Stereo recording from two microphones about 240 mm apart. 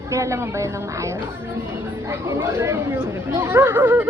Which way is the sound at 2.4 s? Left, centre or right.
Centre.